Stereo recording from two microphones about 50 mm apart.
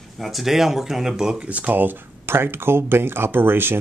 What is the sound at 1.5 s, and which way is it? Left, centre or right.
Speech, right.